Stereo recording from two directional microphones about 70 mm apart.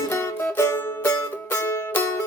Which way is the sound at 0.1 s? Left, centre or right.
Left.